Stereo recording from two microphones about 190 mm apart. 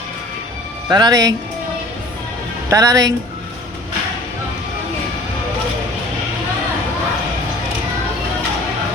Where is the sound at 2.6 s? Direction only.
15° right (ahead or behind).